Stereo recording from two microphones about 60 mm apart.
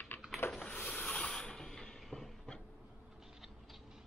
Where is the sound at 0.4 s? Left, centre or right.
Left.